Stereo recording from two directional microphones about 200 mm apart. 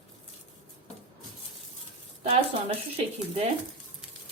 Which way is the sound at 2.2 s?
30° right (ahead or behind).